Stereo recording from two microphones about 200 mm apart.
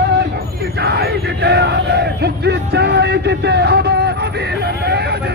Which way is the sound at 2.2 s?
55° right (ahead or behind).